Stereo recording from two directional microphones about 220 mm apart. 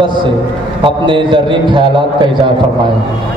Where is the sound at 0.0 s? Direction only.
20° right (ahead or behind).